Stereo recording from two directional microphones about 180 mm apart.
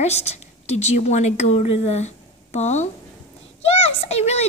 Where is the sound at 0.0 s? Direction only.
35° left (ahead or behind).